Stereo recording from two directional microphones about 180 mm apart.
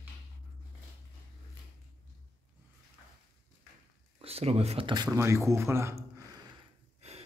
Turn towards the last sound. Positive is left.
turn(degrees=-35)  # may be behind; listen again after turning